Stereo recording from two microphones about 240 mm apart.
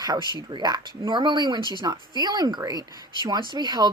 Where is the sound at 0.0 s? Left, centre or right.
Centre.